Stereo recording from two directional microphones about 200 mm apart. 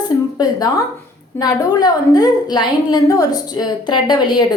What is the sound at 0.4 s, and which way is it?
A woman's voice, 20° left (ahead or behind).